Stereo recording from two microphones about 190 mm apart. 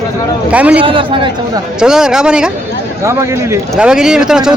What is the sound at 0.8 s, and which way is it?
Speech, 25° right (ahead or behind).